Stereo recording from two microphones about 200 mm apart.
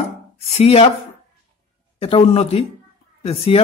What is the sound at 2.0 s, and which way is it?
A woman's voice, 30° left (ahead or behind).